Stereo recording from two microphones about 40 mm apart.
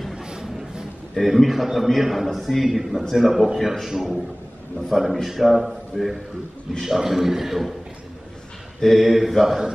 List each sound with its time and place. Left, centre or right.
0.1 s a sound: centre
1.1 s a man's voice: centre
8.8 s a man's voice: centre